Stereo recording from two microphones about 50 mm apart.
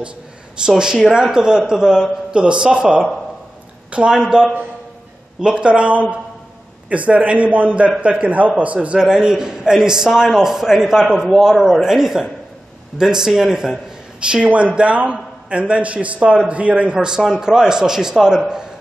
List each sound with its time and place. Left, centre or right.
0.7 s a man's voice: centre
8.9 s a man's voice: centre
14.2 s a man's voice: right